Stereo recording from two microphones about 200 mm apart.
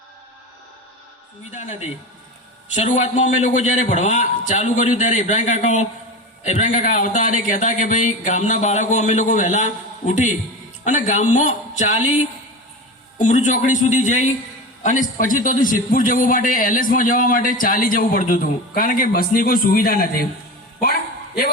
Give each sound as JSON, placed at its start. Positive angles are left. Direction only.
{"t": 1.5, "sound": "a man's voice", "side_deg": 35}